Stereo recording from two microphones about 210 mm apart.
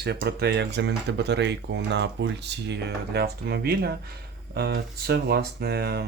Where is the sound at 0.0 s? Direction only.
50° right (ahead or behind).